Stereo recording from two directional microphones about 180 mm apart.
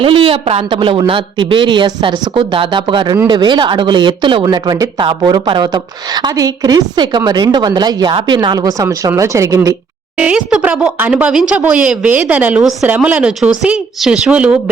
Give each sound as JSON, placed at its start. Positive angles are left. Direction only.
{"t": 0.0, "sound": "speech", "side_deg": -30}
{"t": 10.2, "sound": "a woman's voice", "side_deg": -5}